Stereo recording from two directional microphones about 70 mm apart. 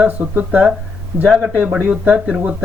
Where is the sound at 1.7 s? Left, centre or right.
Centre.